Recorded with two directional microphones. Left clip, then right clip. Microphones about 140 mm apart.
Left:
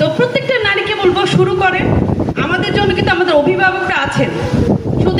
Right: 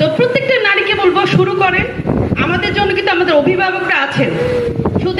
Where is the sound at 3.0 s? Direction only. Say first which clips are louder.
Even; 15° right (ahead or behind).